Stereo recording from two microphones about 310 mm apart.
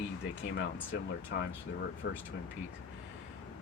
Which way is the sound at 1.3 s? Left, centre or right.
Left.